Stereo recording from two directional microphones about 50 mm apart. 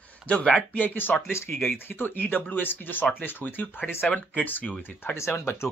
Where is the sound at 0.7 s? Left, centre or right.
Left.